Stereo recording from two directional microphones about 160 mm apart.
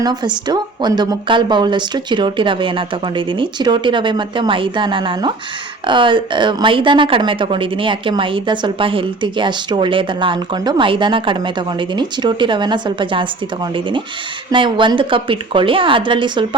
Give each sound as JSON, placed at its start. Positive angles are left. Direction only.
{"t": 0.0, "sound": "a woman's voice", "side_deg": -25}